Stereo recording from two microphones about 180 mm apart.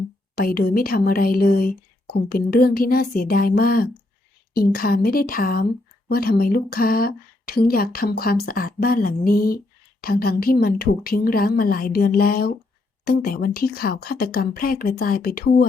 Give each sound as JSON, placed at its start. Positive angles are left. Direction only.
{"t": 0.3, "sound": "speech", "side_deg": 60}